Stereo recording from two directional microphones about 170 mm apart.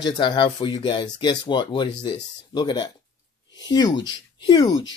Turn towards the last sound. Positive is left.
turn(degrees=25)  # may be behind; listen again after turning